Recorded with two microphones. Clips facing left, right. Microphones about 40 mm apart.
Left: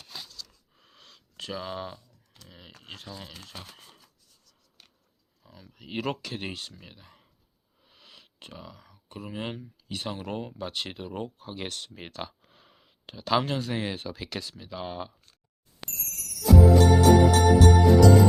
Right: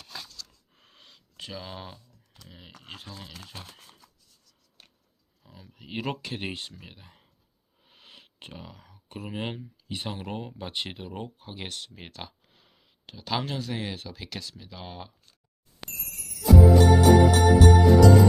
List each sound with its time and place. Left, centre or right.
0.7 s a sound: right
1.0 s a sound: centre
2.5 s speech: centre
5.4 s speech: centre
6.2 s speech: centre
6.5 s speech: right; by 15.1 s centre
15.9 s music: right
16.7 s music: centre